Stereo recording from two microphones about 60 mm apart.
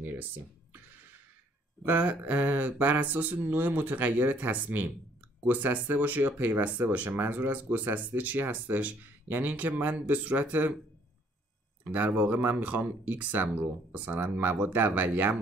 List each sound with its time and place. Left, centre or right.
0.0 s a sound: right
0.7 s music: right
1.9 s speech: right
11.8 s speech: right